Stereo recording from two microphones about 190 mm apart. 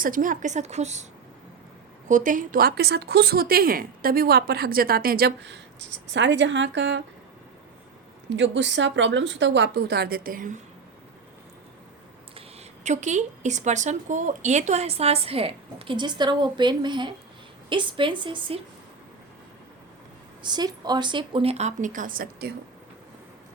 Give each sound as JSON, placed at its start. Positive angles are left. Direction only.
{"t": 0.0, "sound": "speech", "side_deg": -45}
{"t": 2.0, "sound": "a woman's voice", "side_deg": -40}
{"t": 8.3, "sound": "a woman's voice", "side_deg": -70}
{"t": 12.8, "sound": "a woman's voice", "side_deg": -40}
{"t": 20.4, "sound": "speech", "side_deg": -20}